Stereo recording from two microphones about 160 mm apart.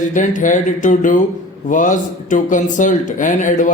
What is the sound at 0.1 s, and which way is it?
A man's voice, 55° left (ahead or behind).